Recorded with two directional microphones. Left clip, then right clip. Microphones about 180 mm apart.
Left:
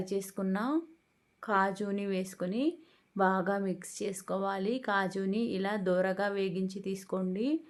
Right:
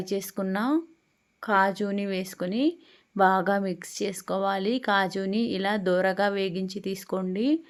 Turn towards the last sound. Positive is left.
turn(degrees=-25)  # may be behind; listen again after turning